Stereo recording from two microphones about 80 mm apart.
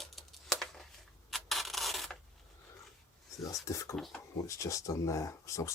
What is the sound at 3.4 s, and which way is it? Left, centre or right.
Speech, left.